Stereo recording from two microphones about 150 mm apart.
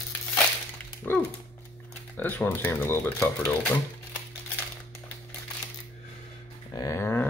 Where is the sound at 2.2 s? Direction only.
10° left (ahead or behind).